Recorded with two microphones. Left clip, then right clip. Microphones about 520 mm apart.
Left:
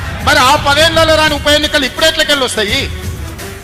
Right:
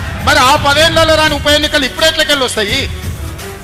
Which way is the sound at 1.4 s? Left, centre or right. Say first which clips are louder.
Even; right.